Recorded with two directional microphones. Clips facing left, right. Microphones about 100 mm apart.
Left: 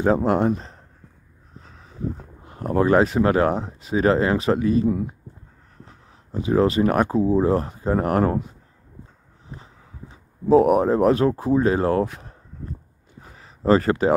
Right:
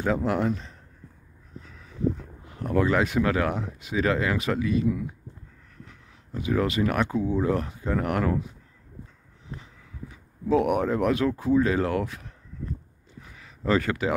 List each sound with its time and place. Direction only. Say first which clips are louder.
0.0 s speech: left 6 dB; 35° left (ahead or behind)
9.6 s speech: even; 35° left (ahead or behind)
13.2 s a sound: left 7 dB; 35° left (ahead or behind)